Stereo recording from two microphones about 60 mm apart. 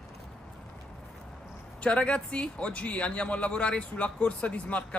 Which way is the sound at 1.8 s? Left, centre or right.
Centre.